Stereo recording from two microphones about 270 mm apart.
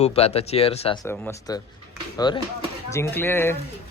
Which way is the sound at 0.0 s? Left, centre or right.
Left.